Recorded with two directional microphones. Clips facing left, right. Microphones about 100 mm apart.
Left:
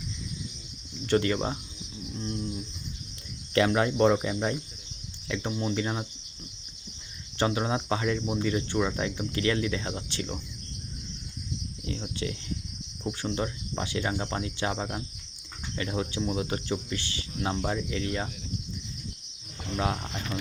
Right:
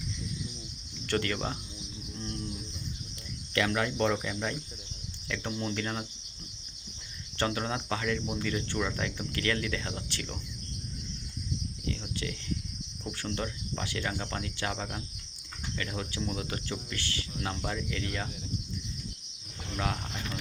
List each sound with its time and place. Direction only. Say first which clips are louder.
1.0 s speech: left 6 dB; 15° left (ahead or behind)
3.5 s speech: left 5 dB; 25° left (ahead or behind)
5.3 s speech: left 4 dB; 15° left (ahead or behind)
7.3 s speech: left 4 dB; 15° left (ahead or behind)
11.9 s speech: left 3 dB; 20° left (ahead or behind)
19.7 s speech: left 4 dB; 20° left (ahead or behind)